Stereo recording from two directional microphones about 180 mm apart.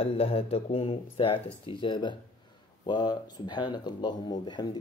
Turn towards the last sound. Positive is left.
turn(degrees=25)  # may be behind; listen again after turning